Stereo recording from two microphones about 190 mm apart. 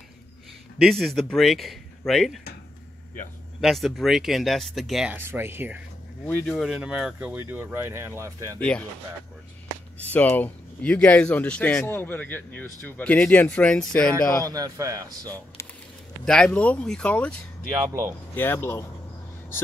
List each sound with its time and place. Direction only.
0.7 s speech: centre (ahead or behind)
3.6 s speech: centre (ahead or behind)
6.2 s speech: 5° left (ahead or behind); by 8.5 s 15° right (ahead or behind)
8.5 s speech: 5° left (ahead or behind)
10.1 s speech: 10° left (ahead or behind)
14.4 s speech: 20° right (ahead or behind)
16.3 s speech: 5° left (ahead or behind)